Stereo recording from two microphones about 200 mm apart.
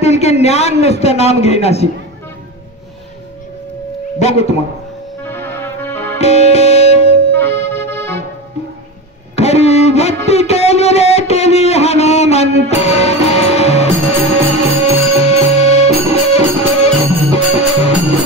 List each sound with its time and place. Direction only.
0.0 s a man's voice: 30° left (ahead or behind)
4.2 s a man's voice: 30° left (ahead or behind)
5.2 s music: 10° left (ahead or behind)
6.1 s music: 30° left (ahead or behind)
7.3 s accordion: 10° left (ahead or behind)
9.3 s a sound: 30° left (ahead or behind)